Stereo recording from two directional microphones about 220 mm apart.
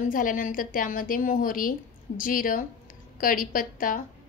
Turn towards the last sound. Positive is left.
turn(degrees=40)  # may be behind; listen again after turning